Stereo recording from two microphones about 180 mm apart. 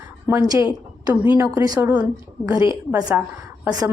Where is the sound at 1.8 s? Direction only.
5° right (ahead or behind).